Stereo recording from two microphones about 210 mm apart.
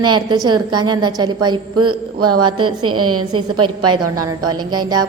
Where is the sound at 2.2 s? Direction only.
90° right.